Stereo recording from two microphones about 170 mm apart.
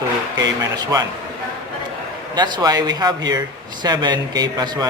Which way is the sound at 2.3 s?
25° right (ahead or behind).